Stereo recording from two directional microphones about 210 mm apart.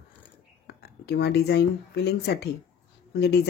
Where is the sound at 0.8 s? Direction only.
50° left (ahead or behind).